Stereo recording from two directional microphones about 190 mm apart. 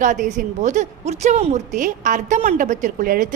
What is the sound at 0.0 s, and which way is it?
A woman's voice, 40° right (ahead or behind).